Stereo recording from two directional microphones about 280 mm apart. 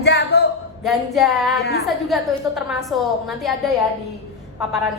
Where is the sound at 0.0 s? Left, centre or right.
Left.